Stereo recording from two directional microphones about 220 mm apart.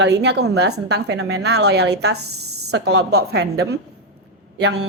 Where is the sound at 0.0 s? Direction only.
50° right (ahead or behind).